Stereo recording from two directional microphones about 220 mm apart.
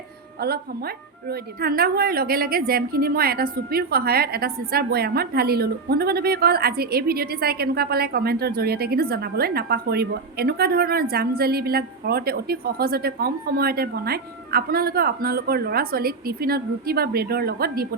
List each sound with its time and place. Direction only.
1.3 s a woman's voice: 45° right (ahead or behind)